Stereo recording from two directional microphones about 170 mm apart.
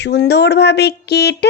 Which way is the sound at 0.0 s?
80° left.